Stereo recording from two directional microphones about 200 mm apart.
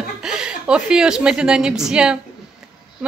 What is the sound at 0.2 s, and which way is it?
A woman's voice, 5° right (ahead or behind).